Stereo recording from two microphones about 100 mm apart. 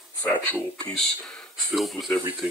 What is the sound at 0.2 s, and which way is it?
Speech, 15° left (ahead or behind).